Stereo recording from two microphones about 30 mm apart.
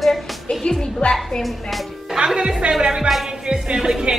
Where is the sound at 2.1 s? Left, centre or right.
Right.